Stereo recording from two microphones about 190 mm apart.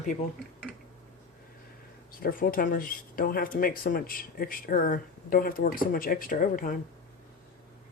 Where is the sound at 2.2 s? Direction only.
50° left (ahead or behind).